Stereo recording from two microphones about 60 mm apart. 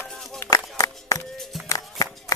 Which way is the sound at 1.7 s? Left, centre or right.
Left.